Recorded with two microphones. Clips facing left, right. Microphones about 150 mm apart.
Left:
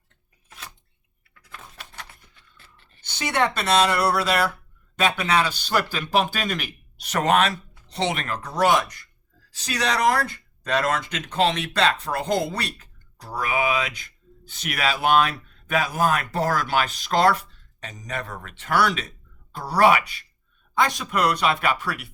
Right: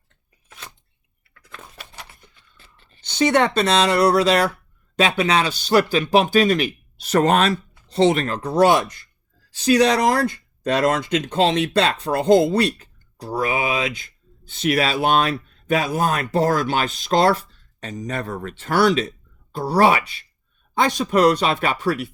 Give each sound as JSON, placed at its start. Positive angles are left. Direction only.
{"t": 1.5, "sound": "a sound", "side_deg": 0}
{"t": 2.6, "sound": "speech", "side_deg": -20}
{"t": 7.1, "sound": "speech", "side_deg": -35}